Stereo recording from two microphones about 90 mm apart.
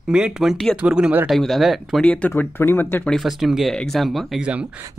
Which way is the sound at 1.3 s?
Centre (ahead or behind).